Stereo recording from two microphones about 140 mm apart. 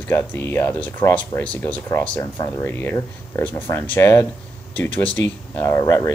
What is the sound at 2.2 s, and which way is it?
Speech, 20° left (ahead or behind).